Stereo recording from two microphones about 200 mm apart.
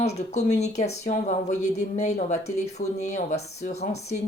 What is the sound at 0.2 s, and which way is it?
Speech, 35° left (ahead or behind).